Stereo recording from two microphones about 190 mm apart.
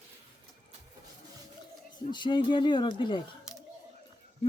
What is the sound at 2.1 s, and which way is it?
Speech, 25° left (ahead or behind).